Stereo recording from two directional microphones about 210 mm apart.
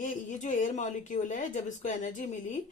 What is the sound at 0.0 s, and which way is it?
Speech, 35° left (ahead or behind).